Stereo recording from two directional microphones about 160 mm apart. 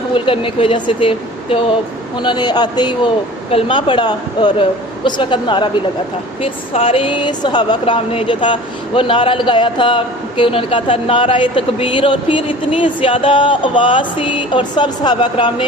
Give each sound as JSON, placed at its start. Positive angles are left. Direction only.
{"t": 0.1, "sound": "a man's voice", "side_deg": 35}